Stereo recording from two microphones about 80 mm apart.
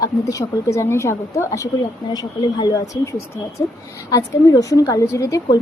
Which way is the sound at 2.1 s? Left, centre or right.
Left.